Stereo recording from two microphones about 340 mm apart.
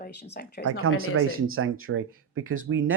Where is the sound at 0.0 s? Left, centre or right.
Left.